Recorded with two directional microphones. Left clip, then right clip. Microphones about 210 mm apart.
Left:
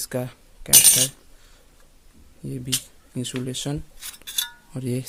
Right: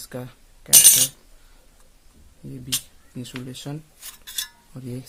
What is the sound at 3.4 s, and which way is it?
Speech, 40° left (ahead or behind).